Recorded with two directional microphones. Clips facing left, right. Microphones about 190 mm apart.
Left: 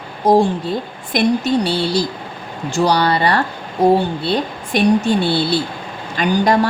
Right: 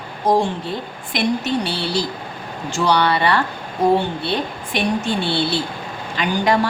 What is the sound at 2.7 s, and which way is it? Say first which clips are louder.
Speech: left 2 dB; 40° left (ahead or behind).